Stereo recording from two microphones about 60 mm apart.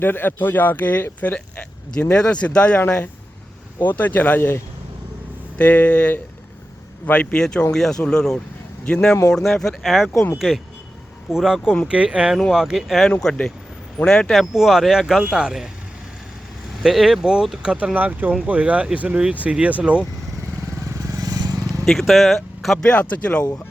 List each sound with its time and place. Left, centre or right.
0.0 s speech: left
5.5 s speech: left
9.3 s speech: centre
11.9 s speech: centre
12.5 s speech: centre
13.2 s speech: centre
14.3 s speech: centre
16.8 s speech: centre
17.9 s speech: right
21.1 s vehicle: right
21.8 s speech: centre
22.8 s speech: centre